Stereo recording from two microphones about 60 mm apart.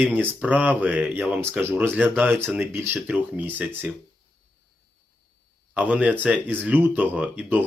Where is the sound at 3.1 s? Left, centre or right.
Right.